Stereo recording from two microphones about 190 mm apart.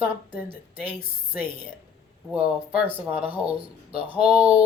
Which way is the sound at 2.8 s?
30° right (ahead or behind).